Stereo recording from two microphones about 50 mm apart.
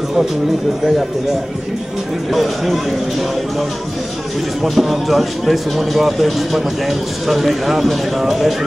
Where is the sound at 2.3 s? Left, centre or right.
Centre.